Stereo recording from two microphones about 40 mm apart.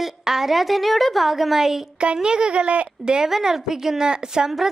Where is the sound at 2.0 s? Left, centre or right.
Right.